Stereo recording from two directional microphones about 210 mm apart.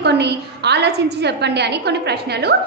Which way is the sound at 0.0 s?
55° right (ahead or behind).